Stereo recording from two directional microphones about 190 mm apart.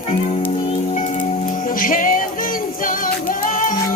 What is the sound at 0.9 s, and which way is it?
Music, 40° left (ahead or behind).